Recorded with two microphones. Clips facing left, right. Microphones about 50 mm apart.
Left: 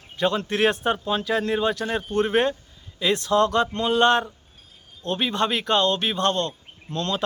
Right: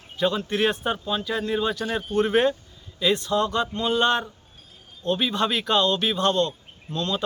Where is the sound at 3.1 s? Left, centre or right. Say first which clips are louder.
Left 5 dB; left.